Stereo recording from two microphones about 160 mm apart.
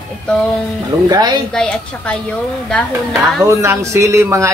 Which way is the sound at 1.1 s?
25° right (ahead or behind).